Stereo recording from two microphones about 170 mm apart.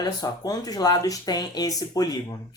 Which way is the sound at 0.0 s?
20° left (ahead or behind).